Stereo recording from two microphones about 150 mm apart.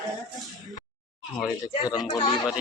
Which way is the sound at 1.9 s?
25° left (ahead or behind).